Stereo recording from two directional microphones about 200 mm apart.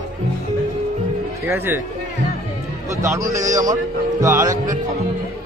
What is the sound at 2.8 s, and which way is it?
A man's voice, 15° right (ahead or behind).